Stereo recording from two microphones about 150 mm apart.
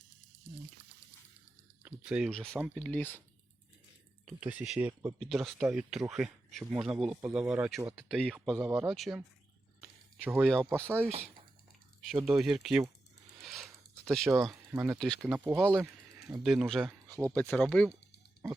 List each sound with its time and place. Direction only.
1.8 s speech: 5° right (ahead or behind); by 3.2 s 10° left (ahead or behind)
4.3 s speech: 10° right (ahead or behind)
9.8 s a sound: 10° right (ahead or behind)
10.4 s speech: 5° left (ahead or behind)
10.7 s speech: 15° right (ahead or behind)
12.2 s speech: 5° right (ahead or behind)
13.4 s a sound: centre (ahead or behind)
14.3 s speech: 20° right (ahead or behind)
14.9 s speech: centre (ahead or behind)
17.1 s speech: 20° right (ahead or behind)
17.3 s speech: 5° left (ahead or behind)